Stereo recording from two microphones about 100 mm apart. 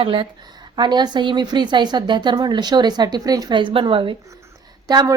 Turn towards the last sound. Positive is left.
turn(degrees=-40)  # may be behind; listen again after turning